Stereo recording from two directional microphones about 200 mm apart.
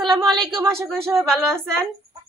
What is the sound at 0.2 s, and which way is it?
Speech, centre (ahead or behind).